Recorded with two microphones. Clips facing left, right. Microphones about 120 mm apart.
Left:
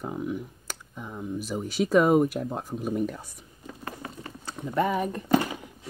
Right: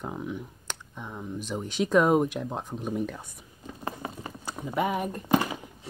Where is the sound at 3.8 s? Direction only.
20° right (ahead or behind).